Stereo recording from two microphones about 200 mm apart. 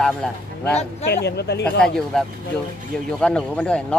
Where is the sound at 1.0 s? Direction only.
55° left (ahead or behind).